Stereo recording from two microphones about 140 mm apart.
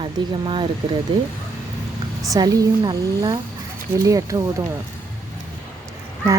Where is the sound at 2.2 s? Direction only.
25° right (ahead or behind).